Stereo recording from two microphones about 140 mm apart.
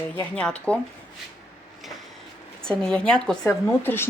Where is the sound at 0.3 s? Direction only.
10° left (ahead or behind).